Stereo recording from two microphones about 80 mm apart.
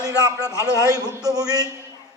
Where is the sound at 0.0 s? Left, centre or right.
Right.